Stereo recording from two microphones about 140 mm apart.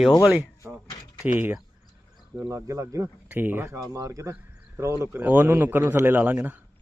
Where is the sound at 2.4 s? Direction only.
25° right (ahead or behind).